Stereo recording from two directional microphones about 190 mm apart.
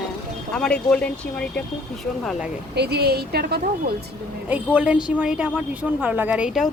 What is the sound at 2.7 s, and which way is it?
A woman's voice, 60° right (ahead or behind).